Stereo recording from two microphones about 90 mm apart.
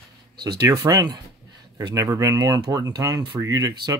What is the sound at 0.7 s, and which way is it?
Speech, 40° right (ahead or behind).